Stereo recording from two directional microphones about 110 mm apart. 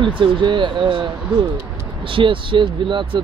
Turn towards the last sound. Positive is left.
turn(degrees=-50)  # may be behind; listen again after turning